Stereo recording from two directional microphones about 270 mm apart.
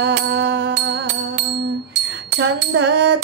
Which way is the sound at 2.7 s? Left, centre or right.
Right.